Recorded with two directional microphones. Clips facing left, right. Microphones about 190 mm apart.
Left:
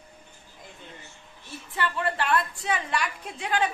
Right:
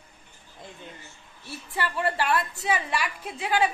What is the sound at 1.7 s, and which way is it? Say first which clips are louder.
A woman's voice: right 1 dB; 10° right (ahead or behind).